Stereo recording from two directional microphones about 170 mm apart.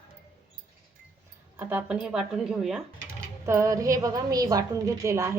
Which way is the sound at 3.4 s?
15° right (ahead or behind).